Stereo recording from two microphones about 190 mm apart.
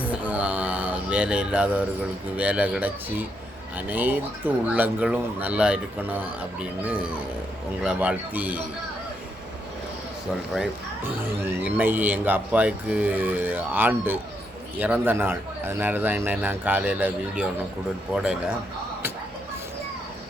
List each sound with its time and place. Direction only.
0.0 s mantra: 5° right (ahead or behind)
2.3 s speech: 5° right (ahead or behind)
10.5 s a man's voice: 10° right (ahead or behind)